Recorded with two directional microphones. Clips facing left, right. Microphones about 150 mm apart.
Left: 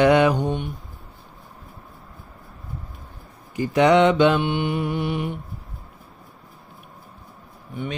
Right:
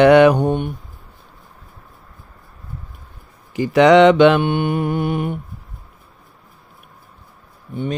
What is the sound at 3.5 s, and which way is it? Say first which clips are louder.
Mantra: right 5 dB; 90° right.